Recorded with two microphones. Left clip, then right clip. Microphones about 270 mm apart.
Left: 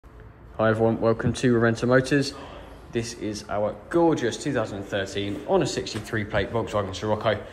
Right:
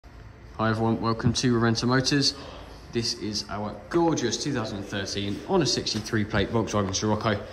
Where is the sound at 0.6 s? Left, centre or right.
Centre.